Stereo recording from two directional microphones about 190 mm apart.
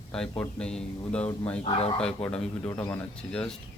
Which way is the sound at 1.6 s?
30° left (ahead or behind).